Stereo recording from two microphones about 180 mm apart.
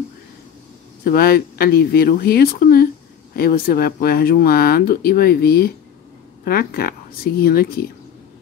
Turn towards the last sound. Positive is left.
turn(degrees=55)  # may be behind; listen again after turning